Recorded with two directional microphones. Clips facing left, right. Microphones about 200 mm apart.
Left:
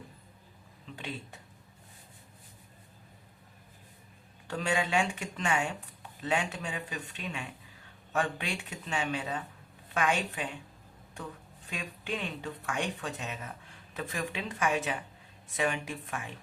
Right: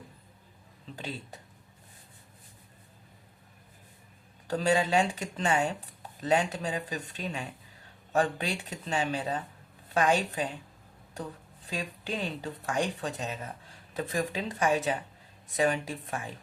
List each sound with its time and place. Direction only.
0.9 s speech: 35° right (ahead or behind)
4.4 s speech: 35° right (ahead or behind)
11.7 s speech: 35° right (ahead or behind)